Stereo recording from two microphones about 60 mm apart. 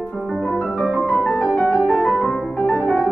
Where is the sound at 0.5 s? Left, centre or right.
Centre.